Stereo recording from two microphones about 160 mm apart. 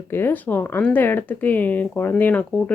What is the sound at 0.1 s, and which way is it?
Speech, 15° left (ahead or behind).